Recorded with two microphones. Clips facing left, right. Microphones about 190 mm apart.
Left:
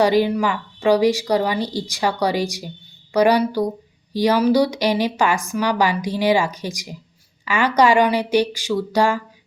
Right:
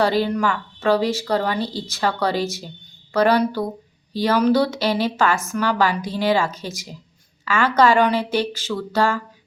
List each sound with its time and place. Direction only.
0.0 s a woman's voice: 15° left (ahead or behind)